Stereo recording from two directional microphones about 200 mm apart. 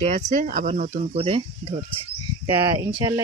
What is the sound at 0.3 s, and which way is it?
Speech, 40° right (ahead or behind).